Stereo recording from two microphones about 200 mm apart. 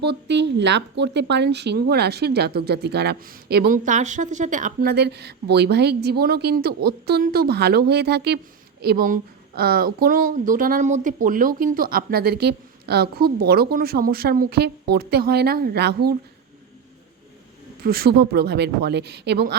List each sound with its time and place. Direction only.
0.0 s a woman's voice: 60° right (ahead or behind)
17.8 s speech: 50° right (ahead or behind)